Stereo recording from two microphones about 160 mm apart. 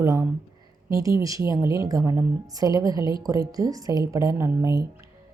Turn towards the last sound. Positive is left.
turn(degrees=-15)  # may be behind; listen again after turning